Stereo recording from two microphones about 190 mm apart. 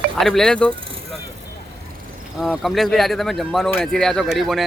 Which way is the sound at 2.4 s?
Centre (ahead or behind).